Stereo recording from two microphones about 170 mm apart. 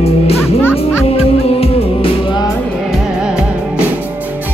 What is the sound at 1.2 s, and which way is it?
Music, 35° left (ahead or behind).